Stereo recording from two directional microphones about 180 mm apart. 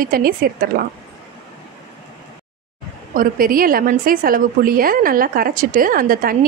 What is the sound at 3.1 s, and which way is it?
A woman's voice, 55° right (ahead or behind).